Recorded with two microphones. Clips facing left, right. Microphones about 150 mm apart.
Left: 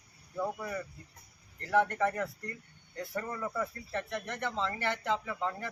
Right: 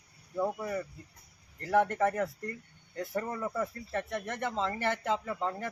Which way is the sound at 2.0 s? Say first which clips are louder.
Right 3 dB; 20° right (ahead or behind).